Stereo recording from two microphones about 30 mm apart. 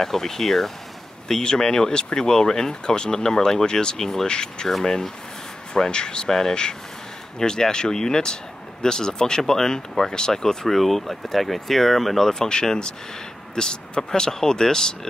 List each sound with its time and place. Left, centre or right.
0.0 s speech: centre
1.4 s speech: left
4.3 s speech: left
5.7 s speech: left
6.2 s speech: centre
10.7 s speech: centre
12.3 s speech: left